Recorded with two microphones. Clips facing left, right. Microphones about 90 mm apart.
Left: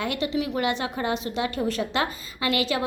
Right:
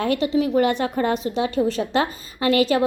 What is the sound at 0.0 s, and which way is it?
A woman's voice, 35° right (ahead or behind).